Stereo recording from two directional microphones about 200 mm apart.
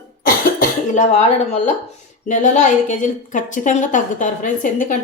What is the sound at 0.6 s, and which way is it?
A woman's voice, 35° left (ahead or behind).